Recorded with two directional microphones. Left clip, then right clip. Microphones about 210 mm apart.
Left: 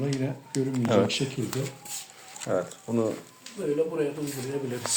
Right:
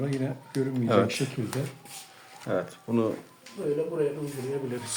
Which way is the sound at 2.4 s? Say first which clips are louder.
Left 1 dB; 10° right (ahead or behind).